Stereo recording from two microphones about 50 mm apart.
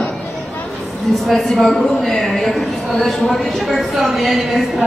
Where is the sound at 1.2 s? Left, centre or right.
Centre.